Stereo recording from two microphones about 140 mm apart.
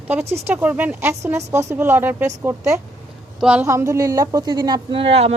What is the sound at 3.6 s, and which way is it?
Speech, 20° right (ahead or behind).